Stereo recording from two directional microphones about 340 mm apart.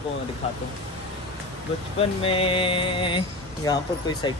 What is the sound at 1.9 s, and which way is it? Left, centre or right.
Speech, centre.